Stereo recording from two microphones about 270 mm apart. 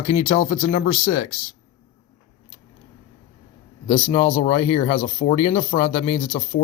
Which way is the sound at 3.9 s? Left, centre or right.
Centre.